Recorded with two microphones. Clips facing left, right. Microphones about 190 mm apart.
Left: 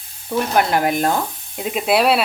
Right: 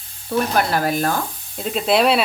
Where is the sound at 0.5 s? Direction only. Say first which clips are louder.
Left 5 dB; 15° left (ahead or behind).